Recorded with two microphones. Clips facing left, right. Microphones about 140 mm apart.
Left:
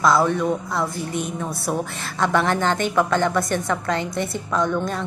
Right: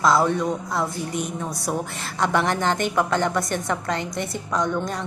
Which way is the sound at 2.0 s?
20° right (ahead or behind).